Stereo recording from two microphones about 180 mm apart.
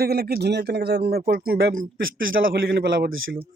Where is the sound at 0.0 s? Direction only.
60° right (ahead or behind).